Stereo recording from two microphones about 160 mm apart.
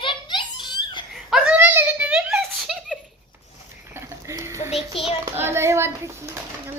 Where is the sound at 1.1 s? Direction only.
5° right (ahead or behind).